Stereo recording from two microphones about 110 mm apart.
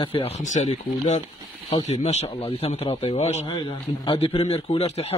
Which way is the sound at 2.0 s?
65° left (ahead or behind).